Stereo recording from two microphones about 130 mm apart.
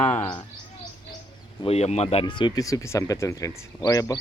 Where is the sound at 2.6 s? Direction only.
25° left (ahead or behind).